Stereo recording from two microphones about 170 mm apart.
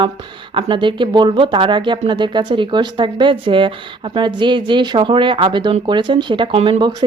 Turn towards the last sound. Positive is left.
turn(degrees=-30)  # may be behind; listen again after turning